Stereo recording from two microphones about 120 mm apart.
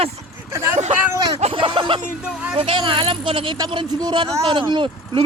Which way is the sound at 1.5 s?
45° right (ahead or behind).